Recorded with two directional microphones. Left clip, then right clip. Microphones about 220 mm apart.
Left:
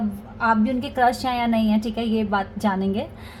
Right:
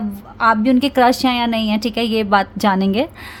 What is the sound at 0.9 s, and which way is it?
Speech, 90° right.